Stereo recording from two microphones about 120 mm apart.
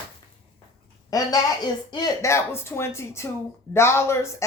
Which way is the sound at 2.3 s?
20° left (ahead or behind).